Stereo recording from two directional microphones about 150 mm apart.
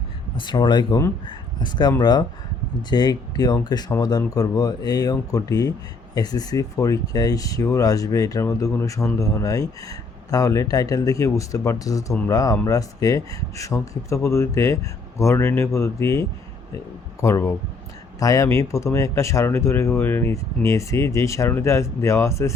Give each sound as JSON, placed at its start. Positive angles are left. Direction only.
{"t": 0.3, "sound": "speech", "side_deg": 30}